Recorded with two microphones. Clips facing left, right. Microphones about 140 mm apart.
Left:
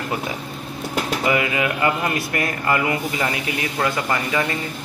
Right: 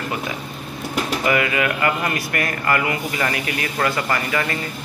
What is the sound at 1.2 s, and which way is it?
Speech, 20° left (ahead or behind).